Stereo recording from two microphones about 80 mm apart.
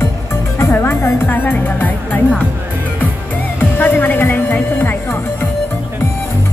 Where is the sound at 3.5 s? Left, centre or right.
Left.